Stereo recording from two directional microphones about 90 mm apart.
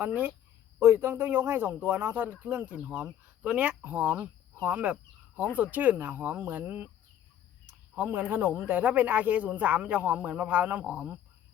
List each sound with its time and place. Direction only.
0.0 s speech: 20° right (ahead or behind)
7.9 s speech: 20° right (ahead or behind)